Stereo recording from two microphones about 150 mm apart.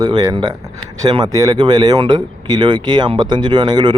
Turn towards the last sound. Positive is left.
turn(degrees=-30)  # may be behind; listen again after turning